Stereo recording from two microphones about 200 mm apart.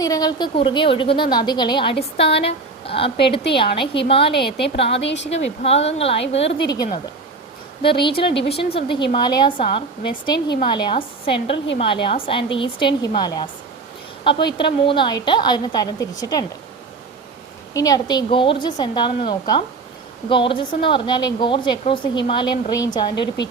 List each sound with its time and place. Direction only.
0.0 s a woman's voice: 20° left (ahead or behind)
4.1 s a woman's voice: 25° left (ahead or behind)
4.9 s speech: 65° left (ahead or behind)
5.6 s a woman's voice: 30° left (ahead or behind)
17.7 s a woman's voice: 20° left (ahead or behind)
23.1 s speech: 60° left (ahead or behind)